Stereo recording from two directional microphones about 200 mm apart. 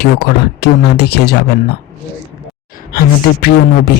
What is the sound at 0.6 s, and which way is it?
Speech, 55° left (ahead or behind).